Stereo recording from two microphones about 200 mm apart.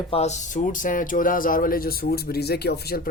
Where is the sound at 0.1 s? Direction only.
35° left (ahead or behind).